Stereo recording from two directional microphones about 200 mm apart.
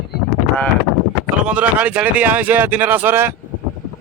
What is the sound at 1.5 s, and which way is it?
Speech, 5° right (ahead or behind).